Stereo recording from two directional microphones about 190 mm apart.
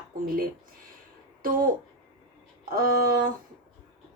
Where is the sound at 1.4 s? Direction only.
45° right (ahead or behind).